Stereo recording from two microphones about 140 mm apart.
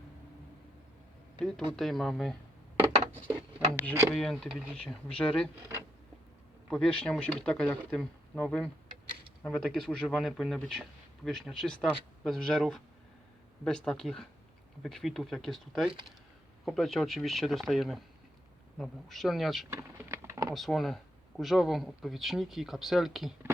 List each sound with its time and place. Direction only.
1.4 s speech: 5° left (ahead or behind)
3.8 s speech: 5° left (ahead or behind)
6.7 s speech: 5° left (ahead or behind)
19.7 s a sound: 20° right (ahead or behind)
20.5 s speech: centre (ahead or behind)